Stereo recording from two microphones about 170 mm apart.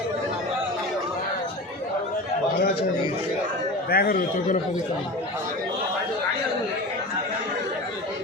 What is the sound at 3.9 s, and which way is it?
Speech, 60° left (ahead or behind).